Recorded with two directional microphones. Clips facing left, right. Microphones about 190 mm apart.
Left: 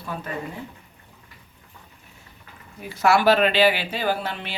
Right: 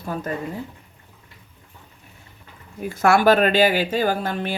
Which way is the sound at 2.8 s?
50° right (ahead or behind).